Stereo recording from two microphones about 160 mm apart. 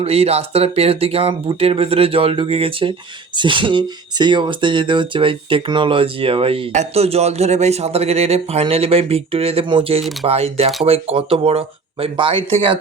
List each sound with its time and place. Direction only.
0.0 s speech: 40° right (ahead or behind)